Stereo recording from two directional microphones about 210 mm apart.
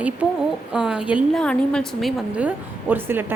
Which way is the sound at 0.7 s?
5° right (ahead or behind).